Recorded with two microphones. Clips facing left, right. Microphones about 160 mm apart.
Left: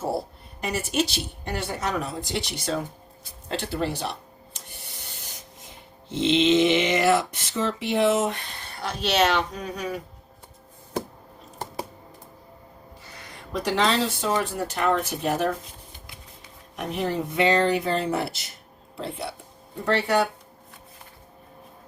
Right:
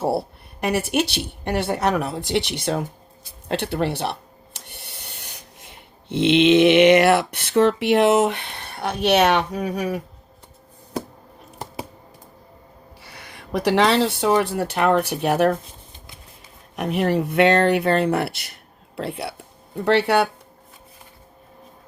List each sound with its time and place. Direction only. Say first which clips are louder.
0.6 s speech: right 5 dB; 65° right (ahead or behind)
13.0 s speech: right 2 dB; 65° right (ahead or behind)
16.7 s speech: right 6 dB; 65° right (ahead or behind)